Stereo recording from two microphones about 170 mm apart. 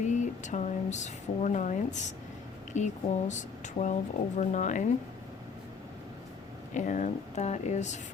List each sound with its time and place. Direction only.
0.0 s speech: 45° left (ahead or behind)
6.7 s speech: 45° left (ahead or behind)